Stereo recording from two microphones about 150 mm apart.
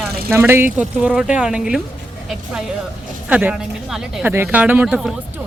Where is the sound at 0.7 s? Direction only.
5° right (ahead or behind).